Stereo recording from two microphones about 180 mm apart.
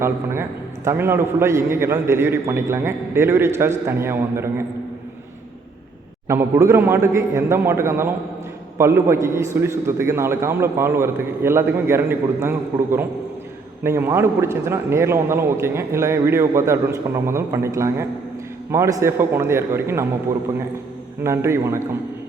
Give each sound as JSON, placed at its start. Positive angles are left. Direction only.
{"t": 0.0, "sound": "a man's voice", "side_deg": -15}
{"t": 6.2, "sound": "a man's voice", "side_deg": -15}
{"t": 21.2, "sound": "a man's voice", "side_deg": -15}